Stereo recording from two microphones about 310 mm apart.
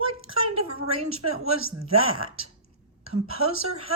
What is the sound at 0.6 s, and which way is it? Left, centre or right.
A woman's voice, right.